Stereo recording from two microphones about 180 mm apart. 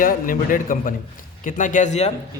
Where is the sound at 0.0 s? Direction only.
50° left (ahead or behind).